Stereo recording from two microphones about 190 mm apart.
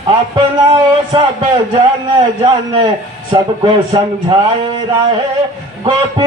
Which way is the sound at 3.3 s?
20° right (ahead or behind).